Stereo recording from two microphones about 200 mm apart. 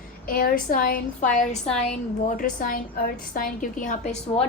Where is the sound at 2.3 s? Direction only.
40° left (ahead or behind).